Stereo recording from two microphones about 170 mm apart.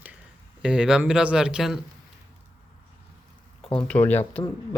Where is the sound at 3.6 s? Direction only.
30° left (ahead or behind).